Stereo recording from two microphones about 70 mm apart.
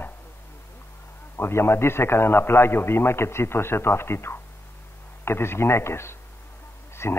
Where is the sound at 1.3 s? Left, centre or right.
Left.